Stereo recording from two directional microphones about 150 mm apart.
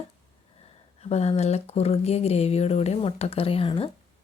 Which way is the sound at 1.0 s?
45° left (ahead or behind).